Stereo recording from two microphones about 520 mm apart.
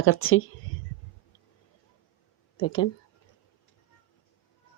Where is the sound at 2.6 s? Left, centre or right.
Left.